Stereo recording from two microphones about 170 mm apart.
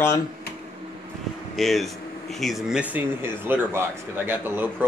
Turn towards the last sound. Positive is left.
turn(degrees=-10)  # may be behind; listen again after turning